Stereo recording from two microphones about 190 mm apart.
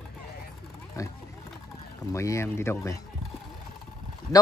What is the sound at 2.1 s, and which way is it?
Speech, 15° left (ahead or behind).